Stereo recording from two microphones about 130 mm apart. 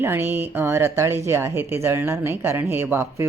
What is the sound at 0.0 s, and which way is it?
Speech, 15° right (ahead or behind).